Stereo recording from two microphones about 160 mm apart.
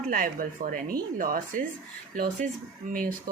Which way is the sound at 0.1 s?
60° right (ahead or behind).